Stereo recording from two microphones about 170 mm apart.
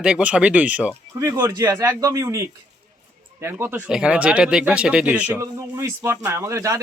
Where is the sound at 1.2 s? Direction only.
20° right (ahead or behind).